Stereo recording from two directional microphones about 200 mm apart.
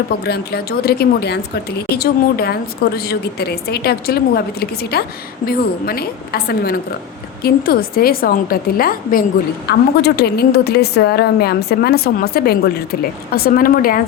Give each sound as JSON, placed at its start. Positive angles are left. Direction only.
{"t": 0.3, "sound": "a woman's voice", "side_deg": 50}